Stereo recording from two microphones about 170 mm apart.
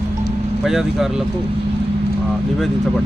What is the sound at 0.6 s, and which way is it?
Speech, centre (ahead or behind).